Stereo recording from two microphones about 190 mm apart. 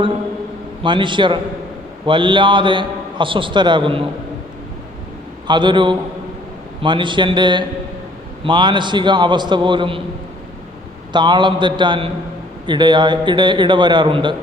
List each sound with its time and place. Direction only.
0.8 s a man's voice: 25° right (ahead or behind)
5.5 s a man's voice: 25° right (ahead or behind)
11.1 s a man's voice: 25° right (ahead or behind)